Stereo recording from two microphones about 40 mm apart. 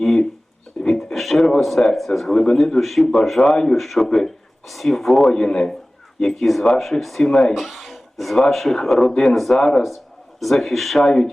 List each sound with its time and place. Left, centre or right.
0.8 s a sound: left
1.1 s a sound: centre
1.6 s speech: centre
2.3 s speech: centre
5.3 s a man's voice: centre
7.5 s speech: centre